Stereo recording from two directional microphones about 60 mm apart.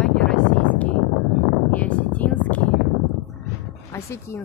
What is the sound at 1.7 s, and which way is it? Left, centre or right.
Speech, left.